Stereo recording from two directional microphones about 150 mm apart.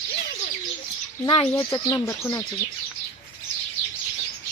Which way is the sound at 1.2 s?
30° left (ahead or behind).